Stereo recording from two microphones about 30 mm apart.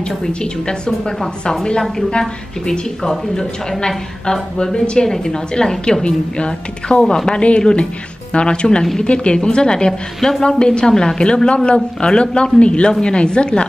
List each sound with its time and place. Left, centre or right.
0.3 s a woman's voice: left
2.1 s a woman's voice: left
3.0 s a woman's voice: centre
6.0 s a woman's voice: left